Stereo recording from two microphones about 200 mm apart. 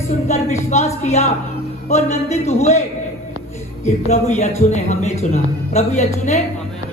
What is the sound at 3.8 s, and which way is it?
A woman's voice, 35° left (ahead or behind).